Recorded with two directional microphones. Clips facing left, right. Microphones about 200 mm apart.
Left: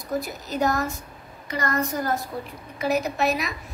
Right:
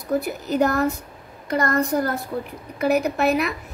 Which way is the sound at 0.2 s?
60° right (ahead or behind).